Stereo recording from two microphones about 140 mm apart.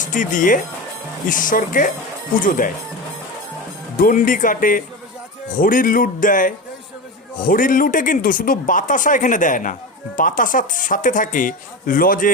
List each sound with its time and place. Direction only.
0.0 s speech: 65° left (ahead or behind)
3.9 s speech: 75° left (ahead or behind)